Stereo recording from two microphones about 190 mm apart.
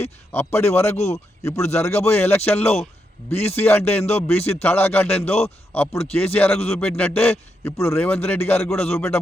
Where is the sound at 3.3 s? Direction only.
35° left (ahead or behind).